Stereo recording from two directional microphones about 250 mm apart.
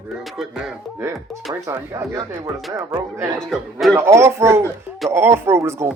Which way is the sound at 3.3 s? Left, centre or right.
Centre.